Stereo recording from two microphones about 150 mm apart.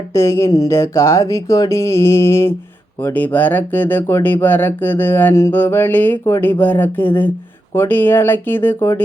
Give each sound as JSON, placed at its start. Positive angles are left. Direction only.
{"t": 0.1, "sound": "speech", "side_deg": 20}